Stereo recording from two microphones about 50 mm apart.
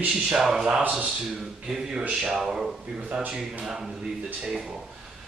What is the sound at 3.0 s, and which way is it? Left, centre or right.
Speech, right.